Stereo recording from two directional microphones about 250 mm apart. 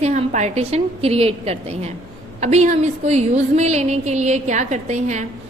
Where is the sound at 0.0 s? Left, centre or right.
Right.